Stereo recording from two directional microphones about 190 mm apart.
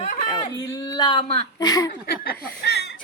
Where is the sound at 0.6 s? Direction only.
20° left (ahead or behind).